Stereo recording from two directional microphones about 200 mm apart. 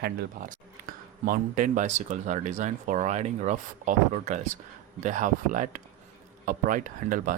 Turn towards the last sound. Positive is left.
turn(degrees=-40)  # may be behind; listen again after turning